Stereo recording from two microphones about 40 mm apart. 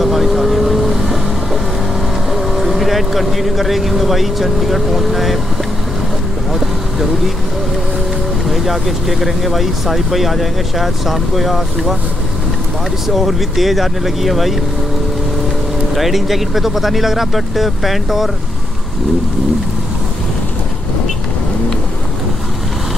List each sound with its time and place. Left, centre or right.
0.0 s vehicle: centre
2.3 s speech: centre
8.5 s speech: centre
13.0 s speech: centre
15.9 s speech: centre